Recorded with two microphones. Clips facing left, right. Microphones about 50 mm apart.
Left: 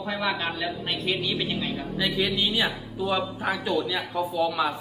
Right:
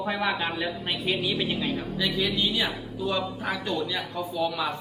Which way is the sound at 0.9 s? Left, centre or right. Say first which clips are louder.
Even; centre.